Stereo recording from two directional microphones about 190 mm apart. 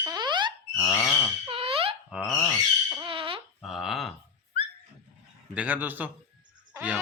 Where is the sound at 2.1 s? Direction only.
5° right (ahead or behind).